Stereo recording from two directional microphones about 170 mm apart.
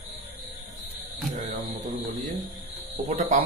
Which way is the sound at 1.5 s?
55° right (ahead or behind).